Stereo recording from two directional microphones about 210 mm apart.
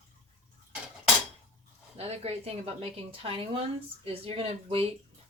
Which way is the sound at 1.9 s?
30° right (ahead or behind).